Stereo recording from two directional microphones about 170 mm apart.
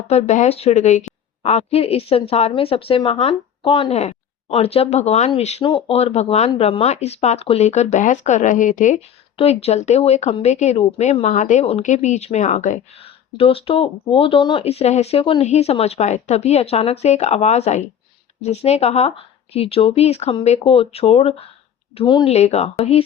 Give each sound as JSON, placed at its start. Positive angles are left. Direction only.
{"t": 0.1, "sound": "speech", "side_deg": 40}
{"t": 9.4, "sound": "speech", "side_deg": 35}